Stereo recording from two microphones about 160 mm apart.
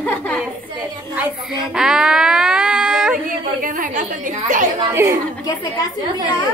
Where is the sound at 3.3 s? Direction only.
60° right (ahead or behind).